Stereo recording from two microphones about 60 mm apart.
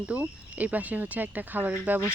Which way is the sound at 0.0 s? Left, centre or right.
Right.